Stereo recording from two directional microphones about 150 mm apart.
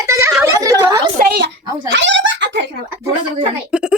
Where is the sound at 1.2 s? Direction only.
90° right.